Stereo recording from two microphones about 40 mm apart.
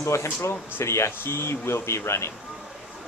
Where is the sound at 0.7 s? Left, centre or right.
Left.